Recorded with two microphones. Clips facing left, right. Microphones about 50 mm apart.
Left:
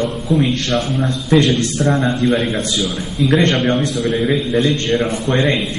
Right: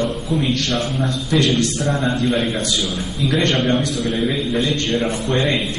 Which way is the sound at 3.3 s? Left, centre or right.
Left.